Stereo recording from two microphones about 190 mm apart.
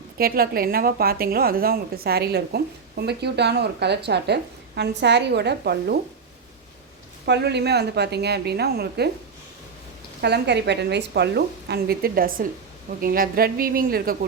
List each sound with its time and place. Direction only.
0.2 s a woman's voice: 50° right (ahead or behind)
7.3 s a woman's voice: 60° right (ahead or behind)
10.2 s a woman's voice: 60° right (ahead or behind)